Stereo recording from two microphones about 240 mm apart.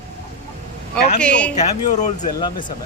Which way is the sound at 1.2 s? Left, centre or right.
Centre.